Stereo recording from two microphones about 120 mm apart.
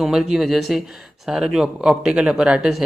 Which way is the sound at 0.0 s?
5° right (ahead or behind).